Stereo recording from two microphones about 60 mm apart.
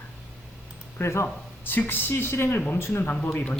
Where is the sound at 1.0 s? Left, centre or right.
Left.